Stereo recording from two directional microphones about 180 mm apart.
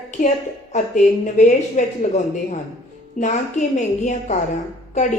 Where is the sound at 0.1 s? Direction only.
40° left (ahead or behind).